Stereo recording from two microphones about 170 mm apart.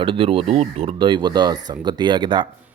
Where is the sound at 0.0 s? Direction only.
30° right (ahead or behind).